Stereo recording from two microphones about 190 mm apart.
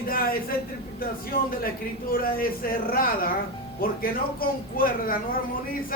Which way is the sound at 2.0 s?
50° left (ahead or behind).